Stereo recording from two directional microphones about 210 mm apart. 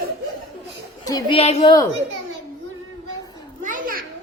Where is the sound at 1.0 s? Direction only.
20° left (ahead or behind).